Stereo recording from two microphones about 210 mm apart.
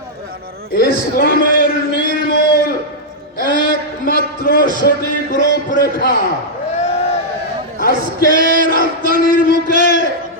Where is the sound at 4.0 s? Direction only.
45° left (ahead or behind).